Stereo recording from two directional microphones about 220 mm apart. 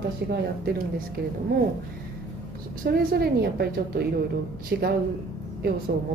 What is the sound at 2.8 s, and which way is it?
A woman's voice, 45° right (ahead or behind).